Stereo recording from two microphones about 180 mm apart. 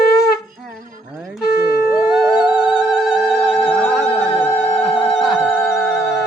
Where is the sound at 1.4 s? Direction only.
60° left (ahead or behind).